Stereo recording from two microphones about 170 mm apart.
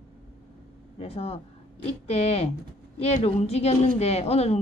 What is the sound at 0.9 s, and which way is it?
A woman's voice, 35° left (ahead or behind).